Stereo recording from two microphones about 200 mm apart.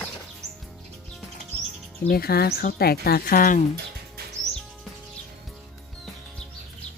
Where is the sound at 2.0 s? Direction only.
50° left (ahead or behind).